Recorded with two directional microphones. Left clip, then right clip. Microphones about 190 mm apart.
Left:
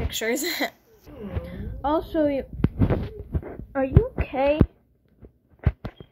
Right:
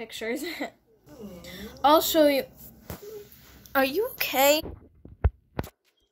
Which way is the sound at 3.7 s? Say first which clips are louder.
Even; 15° right (ahead or behind).